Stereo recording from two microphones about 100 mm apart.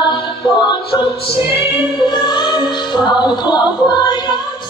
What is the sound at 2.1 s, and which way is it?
Music, 50° left (ahead or behind).